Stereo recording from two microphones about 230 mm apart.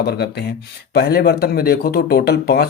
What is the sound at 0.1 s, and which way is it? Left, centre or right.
Speech, left.